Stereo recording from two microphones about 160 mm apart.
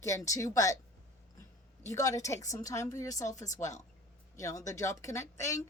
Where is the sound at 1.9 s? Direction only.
20° left (ahead or behind).